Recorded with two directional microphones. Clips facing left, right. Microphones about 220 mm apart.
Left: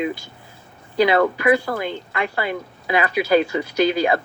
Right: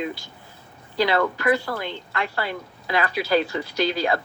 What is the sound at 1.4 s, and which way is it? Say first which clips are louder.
Speech: left 4 dB; 15° left (ahead or behind).